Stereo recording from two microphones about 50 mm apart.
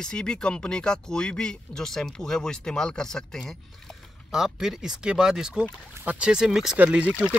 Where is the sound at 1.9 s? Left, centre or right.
Centre.